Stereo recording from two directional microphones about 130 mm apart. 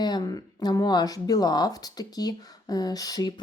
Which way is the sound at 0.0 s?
30° left (ahead or behind).